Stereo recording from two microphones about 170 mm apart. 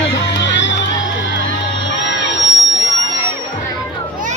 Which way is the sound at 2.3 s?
90° left.